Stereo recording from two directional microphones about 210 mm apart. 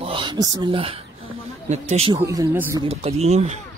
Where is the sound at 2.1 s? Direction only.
15° right (ahead or behind).